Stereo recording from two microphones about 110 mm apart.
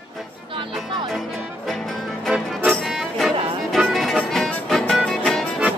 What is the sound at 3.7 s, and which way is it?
Music, centre (ahead or behind).